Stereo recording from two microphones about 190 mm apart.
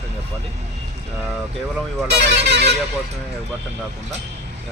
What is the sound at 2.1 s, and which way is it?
Speech, 60° right (ahead or behind).